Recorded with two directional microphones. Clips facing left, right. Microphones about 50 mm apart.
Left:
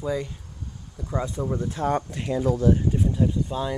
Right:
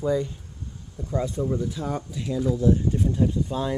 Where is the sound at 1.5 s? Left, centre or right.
Left.